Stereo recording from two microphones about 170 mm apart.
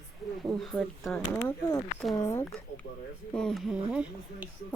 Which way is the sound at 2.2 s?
15° left (ahead or behind).